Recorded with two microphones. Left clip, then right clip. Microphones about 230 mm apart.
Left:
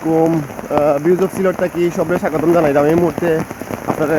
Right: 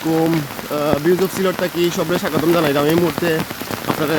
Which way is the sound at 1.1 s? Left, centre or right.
Centre.